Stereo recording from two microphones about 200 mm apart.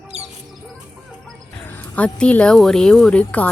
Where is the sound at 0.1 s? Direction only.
30° right (ahead or behind).